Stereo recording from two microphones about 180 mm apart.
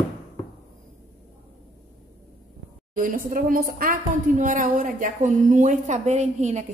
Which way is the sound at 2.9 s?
50° right (ahead or behind).